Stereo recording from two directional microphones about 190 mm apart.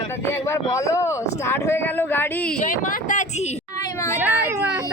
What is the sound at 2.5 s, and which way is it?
Speech, 45° left (ahead or behind).